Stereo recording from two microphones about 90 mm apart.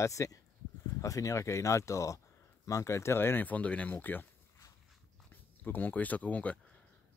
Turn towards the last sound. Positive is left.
turn(degrees=15)  # may be behind; listen again after turning